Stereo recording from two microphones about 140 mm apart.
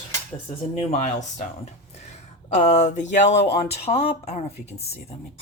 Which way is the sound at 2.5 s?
55° left (ahead or behind).